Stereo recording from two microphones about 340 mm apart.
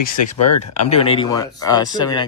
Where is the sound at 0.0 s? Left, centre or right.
Left.